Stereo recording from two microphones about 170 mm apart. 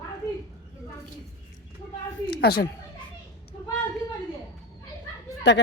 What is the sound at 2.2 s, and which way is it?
Speech, 70° left (ahead or behind).